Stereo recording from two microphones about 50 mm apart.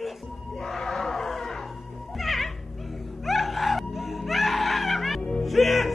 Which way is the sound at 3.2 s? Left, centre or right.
Centre.